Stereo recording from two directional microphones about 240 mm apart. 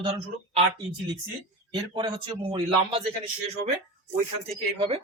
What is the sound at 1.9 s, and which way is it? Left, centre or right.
Speech, right.